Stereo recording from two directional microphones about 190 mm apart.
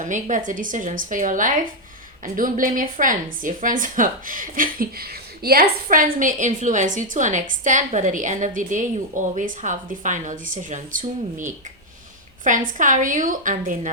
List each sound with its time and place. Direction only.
0.0 s a woman's voice: 40° right (ahead or behind)